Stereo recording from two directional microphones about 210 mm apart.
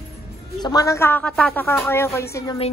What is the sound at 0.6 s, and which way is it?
Speech, 15° left (ahead or behind).